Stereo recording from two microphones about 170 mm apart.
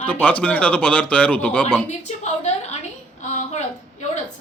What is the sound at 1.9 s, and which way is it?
A woman's voice, 40° left (ahead or behind).